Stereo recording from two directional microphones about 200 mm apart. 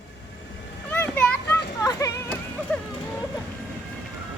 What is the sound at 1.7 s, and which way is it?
Music, 15° left (ahead or behind).